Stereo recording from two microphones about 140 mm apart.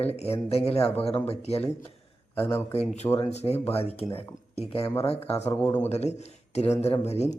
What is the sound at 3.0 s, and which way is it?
Speech, 15° left (ahead or behind).